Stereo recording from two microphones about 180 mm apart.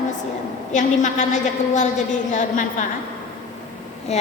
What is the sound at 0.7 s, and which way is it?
A woman's voice, 40° left (ahead or behind).